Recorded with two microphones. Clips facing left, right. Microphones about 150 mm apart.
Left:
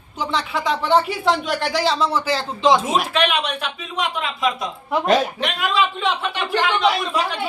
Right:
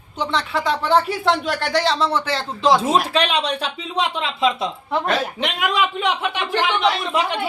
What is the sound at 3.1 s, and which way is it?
A man's voice, 30° right (ahead or behind).